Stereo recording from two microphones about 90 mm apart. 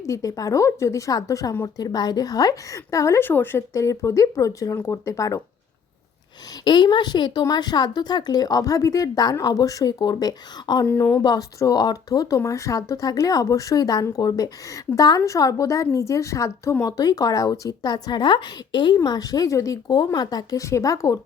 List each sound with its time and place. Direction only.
0.0 s a woman's voice: 35° left (ahead or behind)
6.7 s a woman's voice: 55° left (ahead or behind)
10.9 s a woman's voice: 35° left (ahead or behind)